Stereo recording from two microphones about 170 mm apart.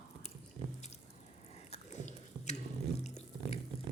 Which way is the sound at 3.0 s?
40° left (ahead or behind).